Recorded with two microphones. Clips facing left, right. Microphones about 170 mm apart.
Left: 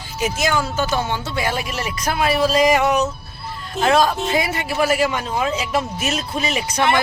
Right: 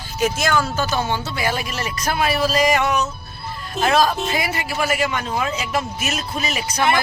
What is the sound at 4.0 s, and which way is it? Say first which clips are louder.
Speech: left 1 dB; 25° left (ahead or behind).